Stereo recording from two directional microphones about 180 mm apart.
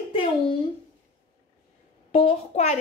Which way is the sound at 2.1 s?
35° left (ahead or behind).